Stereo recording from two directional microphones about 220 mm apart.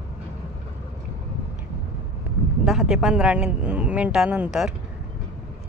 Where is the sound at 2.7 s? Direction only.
Centre (ahead or behind).